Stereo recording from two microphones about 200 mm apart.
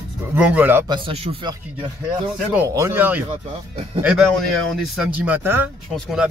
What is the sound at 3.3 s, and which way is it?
Speech, 30° right (ahead or behind).